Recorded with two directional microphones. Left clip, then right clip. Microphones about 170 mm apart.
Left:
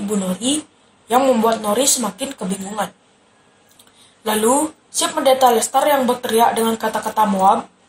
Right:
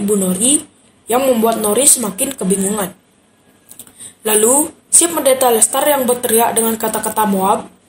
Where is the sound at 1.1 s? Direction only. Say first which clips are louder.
Right 1 dB; 45° right (ahead or behind).